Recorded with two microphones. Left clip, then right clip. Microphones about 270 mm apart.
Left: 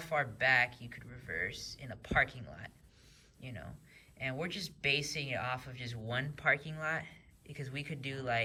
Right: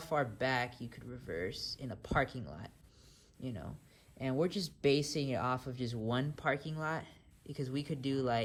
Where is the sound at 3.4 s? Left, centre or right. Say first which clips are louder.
Right 3 dB; centre.